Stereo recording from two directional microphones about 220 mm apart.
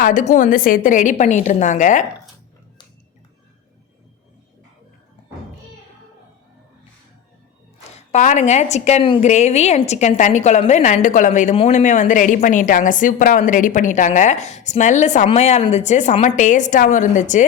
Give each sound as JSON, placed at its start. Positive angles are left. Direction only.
{"t": 0.0, "sound": "a woman's voice", "side_deg": 35}
{"t": 7.9, "sound": "a woman's voice", "side_deg": 30}